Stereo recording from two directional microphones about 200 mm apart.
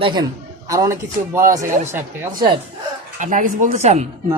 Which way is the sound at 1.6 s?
40° right (ahead or behind).